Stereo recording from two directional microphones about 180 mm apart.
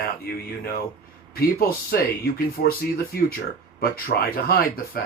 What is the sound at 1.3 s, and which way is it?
Speech, 55° left (ahead or behind).